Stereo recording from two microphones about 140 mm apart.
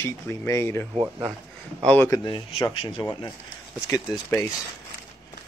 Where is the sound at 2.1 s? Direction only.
35° left (ahead or behind).